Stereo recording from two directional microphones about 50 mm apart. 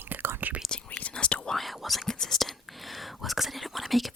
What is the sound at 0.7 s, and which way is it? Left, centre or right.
Whispering, left.